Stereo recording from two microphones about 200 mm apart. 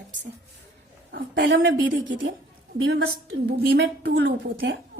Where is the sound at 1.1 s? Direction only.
45° right (ahead or behind).